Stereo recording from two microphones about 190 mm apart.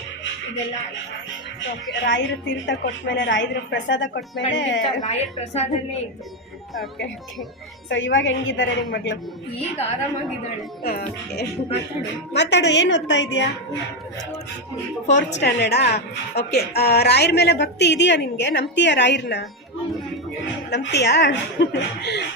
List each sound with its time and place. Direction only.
1.9 s a woman's voice: 70° left (ahead or behind)
5.0 s a woman's voice: 35° left (ahead or behind)
7.9 s a woman's voice: 80° left
10.8 s speech: 50° left (ahead or behind)
12.3 s a woman's voice: 65° left (ahead or behind)
15.0 s a woman's voice: 70° left (ahead or behind)
20.7 s a woman's voice: 65° left (ahead or behind)